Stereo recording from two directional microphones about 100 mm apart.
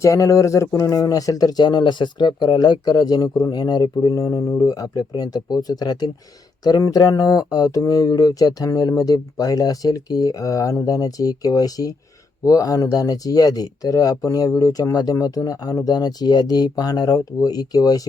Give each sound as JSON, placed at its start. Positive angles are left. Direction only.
{"t": 0.0, "sound": "speech", "side_deg": 30}